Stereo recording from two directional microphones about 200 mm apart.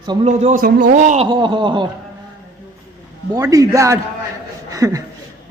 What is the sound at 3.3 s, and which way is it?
Speech, 15° right (ahead or behind).